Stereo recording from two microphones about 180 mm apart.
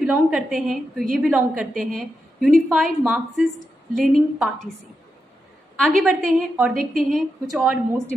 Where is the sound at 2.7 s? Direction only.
Centre (ahead or behind).